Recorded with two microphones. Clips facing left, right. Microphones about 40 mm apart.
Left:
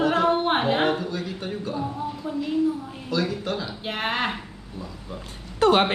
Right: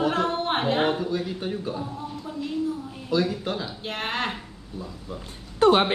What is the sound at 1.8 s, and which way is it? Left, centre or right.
Speech, centre.